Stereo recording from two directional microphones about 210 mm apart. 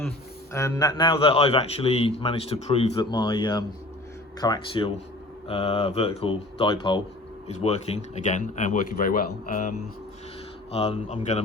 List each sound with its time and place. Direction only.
0.5 s a man's voice: 15° left (ahead or behind); by 9.7 s 40° left (ahead or behind)
10.7 s a man's voice: 30° left (ahead or behind)